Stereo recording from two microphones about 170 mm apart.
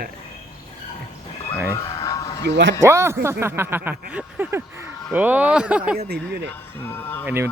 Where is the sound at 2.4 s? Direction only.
90° right.